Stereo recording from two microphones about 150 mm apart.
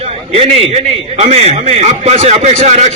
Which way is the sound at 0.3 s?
40° right (ahead or behind).